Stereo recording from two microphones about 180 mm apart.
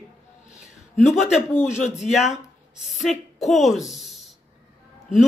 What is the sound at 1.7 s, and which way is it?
Speech, 40° left (ahead or behind).